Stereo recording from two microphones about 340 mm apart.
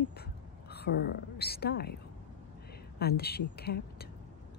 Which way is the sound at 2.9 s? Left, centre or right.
Left.